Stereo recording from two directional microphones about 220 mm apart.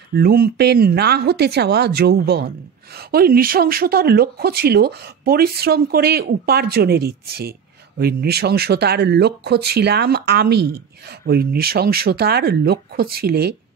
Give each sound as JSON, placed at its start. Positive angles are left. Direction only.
{"t": 0.1, "sound": "speech", "side_deg": -45}